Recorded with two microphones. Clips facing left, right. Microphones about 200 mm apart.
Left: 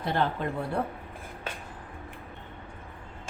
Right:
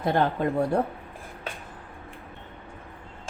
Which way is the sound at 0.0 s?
45° right (ahead or behind).